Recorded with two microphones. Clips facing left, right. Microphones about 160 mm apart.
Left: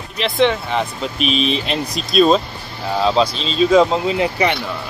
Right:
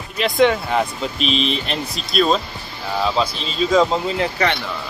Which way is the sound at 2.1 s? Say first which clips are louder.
Left 5 dB; 20° left (ahead or behind).